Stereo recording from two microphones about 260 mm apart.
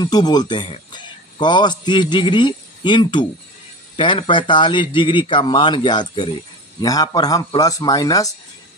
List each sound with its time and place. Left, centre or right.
0.0 s a man's voice: centre